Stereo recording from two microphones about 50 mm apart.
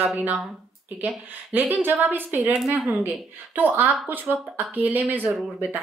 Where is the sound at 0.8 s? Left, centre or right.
Right.